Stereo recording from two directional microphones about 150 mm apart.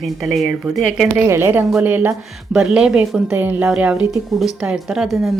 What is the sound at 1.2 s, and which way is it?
A woman's voice, 15° right (ahead or behind).